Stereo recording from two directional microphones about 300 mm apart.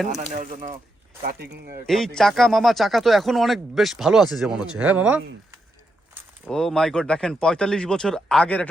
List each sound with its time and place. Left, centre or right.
0.1 s speech: right
1.9 s speech: centre